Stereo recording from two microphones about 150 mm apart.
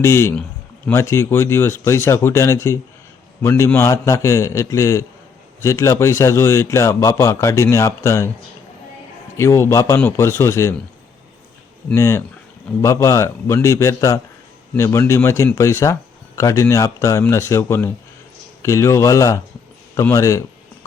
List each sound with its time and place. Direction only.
0.0 s a man's voice: 20° left (ahead or behind)
9.4 s a man's voice: 20° left (ahead or behind)
11.9 s a man's voice: 15° left (ahead or behind)